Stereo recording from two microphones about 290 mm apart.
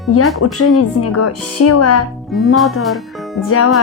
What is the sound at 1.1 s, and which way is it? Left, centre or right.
Speech, left.